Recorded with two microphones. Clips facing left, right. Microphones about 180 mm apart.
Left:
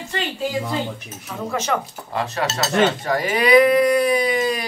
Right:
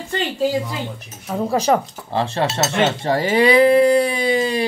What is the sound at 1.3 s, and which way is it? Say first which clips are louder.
Speech: right 6 dB; 35° right (ahead or behind).